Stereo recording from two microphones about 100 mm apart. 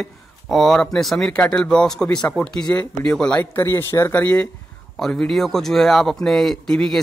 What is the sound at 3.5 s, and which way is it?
A man's voice, 25° left (ahead or behind).